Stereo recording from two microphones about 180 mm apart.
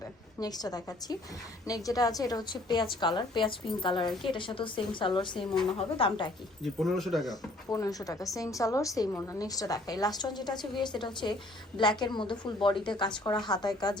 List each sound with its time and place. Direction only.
0.3 s a woman's voice: 20° left (ahead or behind)
6.6 s speech: centre (ahead or behind)
7.7 s a woman's voice: 20° left (ahead or behind)